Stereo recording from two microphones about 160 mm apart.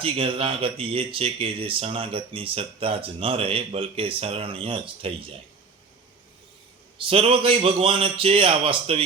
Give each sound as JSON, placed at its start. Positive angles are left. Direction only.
{"t": 0.0, "sound": "speech", "side_deg": -35}
{"t": 7.0, "sound": "speech", "side_deg": -35}